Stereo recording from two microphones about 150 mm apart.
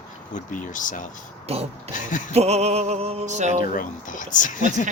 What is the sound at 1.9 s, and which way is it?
Speech, 60° left (ahead or behind).